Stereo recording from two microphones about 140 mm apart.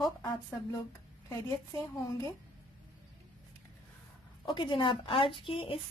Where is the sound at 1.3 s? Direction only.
25° left (ahead or behind).